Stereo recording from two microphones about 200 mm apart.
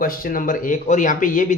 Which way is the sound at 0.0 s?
45° left (ahead or behind).